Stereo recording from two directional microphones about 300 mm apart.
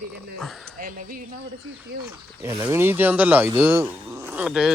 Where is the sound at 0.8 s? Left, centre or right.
Right.